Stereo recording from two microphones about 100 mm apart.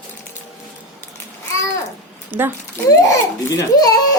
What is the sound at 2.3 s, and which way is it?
Speech, 20° right (ahead or behind).